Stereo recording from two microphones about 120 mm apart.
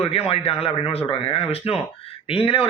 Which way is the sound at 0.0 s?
55° left (ahead or behind).